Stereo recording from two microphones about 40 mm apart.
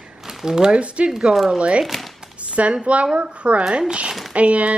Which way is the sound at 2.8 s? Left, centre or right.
Right.